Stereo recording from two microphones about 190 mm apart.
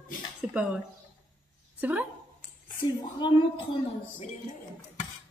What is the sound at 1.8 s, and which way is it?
Speech, 10° right (ahead or behind).